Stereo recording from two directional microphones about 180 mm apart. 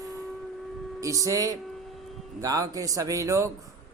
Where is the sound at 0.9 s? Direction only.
20° right (ahead or behind).